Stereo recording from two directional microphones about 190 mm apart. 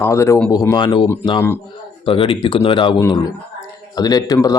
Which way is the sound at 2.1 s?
30° left (ahead or behind).